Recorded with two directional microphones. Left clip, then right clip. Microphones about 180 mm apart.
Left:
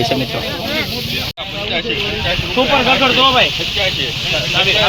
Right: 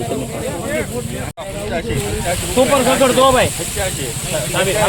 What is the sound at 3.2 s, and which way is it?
Speech, 60° right (ahead or behind).